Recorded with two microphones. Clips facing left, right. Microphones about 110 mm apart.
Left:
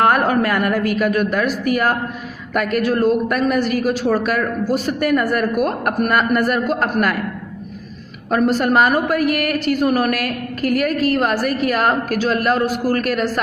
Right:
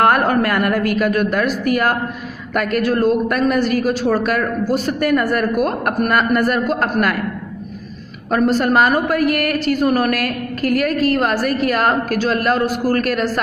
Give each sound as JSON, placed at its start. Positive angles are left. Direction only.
{"t": 0.0, "sound": "a woman's voice", "side_deg": 10}
{"t": 2.5, "sound": "a man's voice", "side_deg": 5}
{"t": 8.3, "sound": "a man's voice", "side_deg": 10}
{"t": 10.6, "sound": "a woman's voice", "side_deg": -40}
{"t": 11.1, "sound": "a man's voice", "side_deg": 5}